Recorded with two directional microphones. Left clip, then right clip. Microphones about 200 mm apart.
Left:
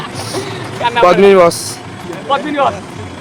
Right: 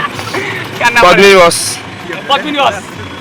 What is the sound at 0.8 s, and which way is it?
Speech, 20° left (ahead or behind).